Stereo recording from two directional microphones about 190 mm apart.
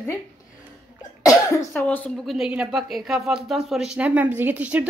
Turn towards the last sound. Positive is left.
turn(degrees=-5)  # may be behind; listen again after turning